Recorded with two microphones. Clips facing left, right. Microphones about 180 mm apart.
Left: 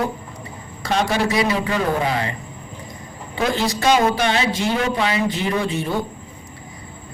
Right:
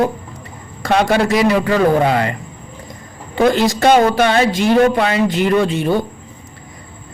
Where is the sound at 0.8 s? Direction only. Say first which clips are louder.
Right 6 dB; 50° right (ahead or behind).